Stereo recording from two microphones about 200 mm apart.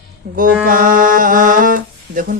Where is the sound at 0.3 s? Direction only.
45° right (ahead or behind).